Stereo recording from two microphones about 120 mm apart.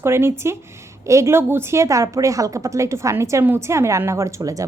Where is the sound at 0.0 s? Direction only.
20° right (ahead or behind).